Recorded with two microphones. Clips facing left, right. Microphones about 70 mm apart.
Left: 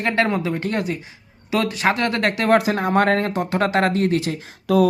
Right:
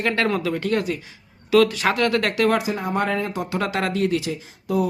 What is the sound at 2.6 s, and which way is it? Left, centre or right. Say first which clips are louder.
Speech: left 5 dB; left.